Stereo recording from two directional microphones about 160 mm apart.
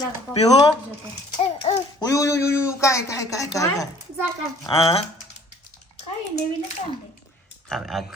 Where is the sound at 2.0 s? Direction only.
20° left (ahead or behind).